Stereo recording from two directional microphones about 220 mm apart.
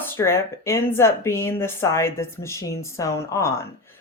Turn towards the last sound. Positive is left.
turn(degrees=15)  # may be behind; listen again after turning